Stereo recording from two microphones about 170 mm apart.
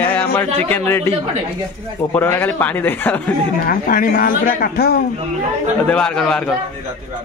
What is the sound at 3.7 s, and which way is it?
A man's voice, 55° left (ahead or behind).